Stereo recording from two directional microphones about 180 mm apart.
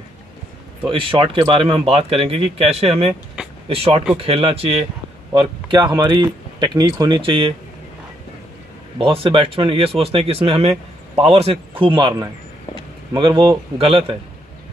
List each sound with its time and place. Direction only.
0.8 s speech: 30° right (ahead or behind)
8.9 s speech: 30° right (ahead or behind)